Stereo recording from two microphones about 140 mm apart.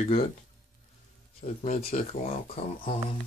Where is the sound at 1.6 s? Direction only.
50° left (ahead or behind).